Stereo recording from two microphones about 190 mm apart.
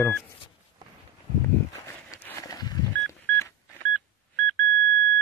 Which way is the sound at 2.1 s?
15° left (ahead or behind).